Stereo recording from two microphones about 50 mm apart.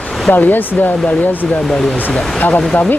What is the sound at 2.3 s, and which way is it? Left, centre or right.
Speech, left.